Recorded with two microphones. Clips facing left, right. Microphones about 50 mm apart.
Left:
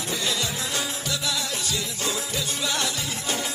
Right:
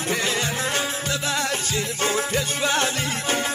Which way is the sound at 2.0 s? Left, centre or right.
Right.